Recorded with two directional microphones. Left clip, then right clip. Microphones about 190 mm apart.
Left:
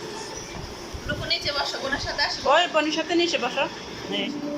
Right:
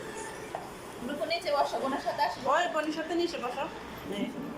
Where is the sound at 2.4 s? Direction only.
15° left (ahead or behind).